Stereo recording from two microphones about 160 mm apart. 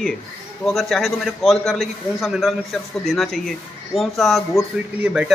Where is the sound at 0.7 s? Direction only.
Centre (ahead or behind).